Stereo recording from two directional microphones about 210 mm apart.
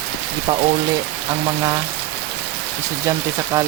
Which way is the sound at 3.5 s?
15° right (ahead or behind).